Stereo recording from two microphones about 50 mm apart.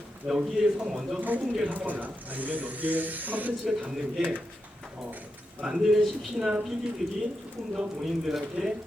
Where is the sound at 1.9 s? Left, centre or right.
Right.